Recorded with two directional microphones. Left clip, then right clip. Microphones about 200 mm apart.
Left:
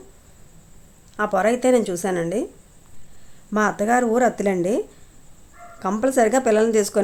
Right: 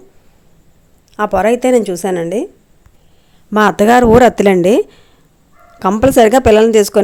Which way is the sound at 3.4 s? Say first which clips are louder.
Right 10 dB; 40° right (ahead or behind).